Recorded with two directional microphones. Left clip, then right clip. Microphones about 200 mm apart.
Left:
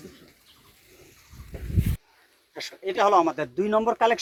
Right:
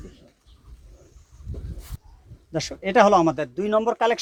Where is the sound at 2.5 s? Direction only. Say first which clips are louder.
Right 8 dB; 50° right (ahead or behind).